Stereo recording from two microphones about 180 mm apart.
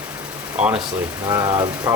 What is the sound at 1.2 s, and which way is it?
Speech, 20° right (ahead or behind).